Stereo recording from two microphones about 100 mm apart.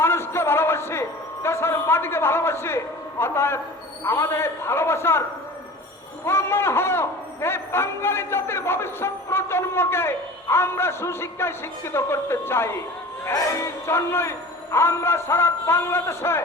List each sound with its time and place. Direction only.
0.0 s a sound: 25° left (ahead or behind)
4.0 s speech: 25° left (ahead or behind)
6.2 s speech: 25° left (ahead or behind)